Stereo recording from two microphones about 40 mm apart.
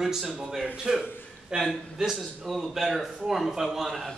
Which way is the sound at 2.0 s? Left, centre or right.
Centre.